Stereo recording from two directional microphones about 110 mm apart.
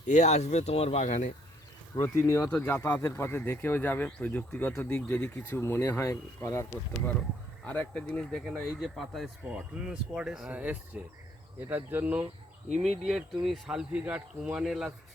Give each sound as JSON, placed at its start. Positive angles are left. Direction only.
{"t": 0.1, "sound": "speech", "side_deg": 90}
{"t": 2.0, "sound": "speech", "side_deg": 30}
{"t": 7.6, "sound": "speech", "side_deg": 10}
{"t": 9.4, "sound": "speech", "side_deg": -10}
{"t": 13.1, "sound": "speech", "side_deg": 0}